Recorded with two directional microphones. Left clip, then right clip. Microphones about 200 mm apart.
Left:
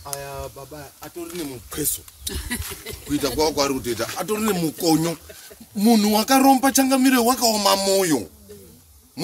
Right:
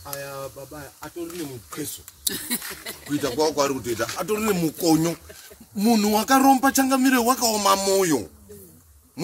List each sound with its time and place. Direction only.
0.2 s speech: 10° right (ahead or behind)
2.2 s speech: 40° right (ahead or behind)
3.1 s speech: 20° left (ahead or behind)
4.1 s speech: 5° left (ahead or behind)